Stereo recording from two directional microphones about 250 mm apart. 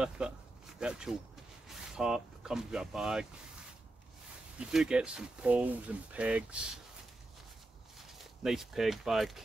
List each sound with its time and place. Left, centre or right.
0.2 s speech: centre
4.6 s speech: centre
8.0 s speech: centre